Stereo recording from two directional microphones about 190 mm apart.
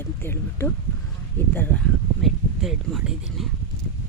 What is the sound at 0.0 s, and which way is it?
Speech, 10° left (ahead or behind).